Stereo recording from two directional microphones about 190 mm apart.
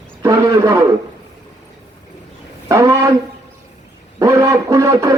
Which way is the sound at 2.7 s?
15° right (ahead or behind).